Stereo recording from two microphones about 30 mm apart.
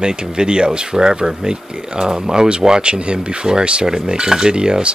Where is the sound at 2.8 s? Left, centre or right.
Right.